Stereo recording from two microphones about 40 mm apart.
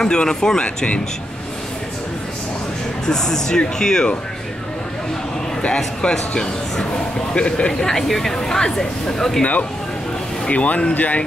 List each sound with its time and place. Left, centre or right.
0.0 s speech: centre
3.1 s speech: centre
6.0 s speech: left
7.8 s speech: centre
9.4 s speech: left